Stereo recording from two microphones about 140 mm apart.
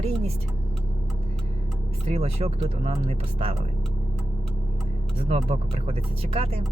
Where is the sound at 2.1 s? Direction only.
45° right (ahead or behind).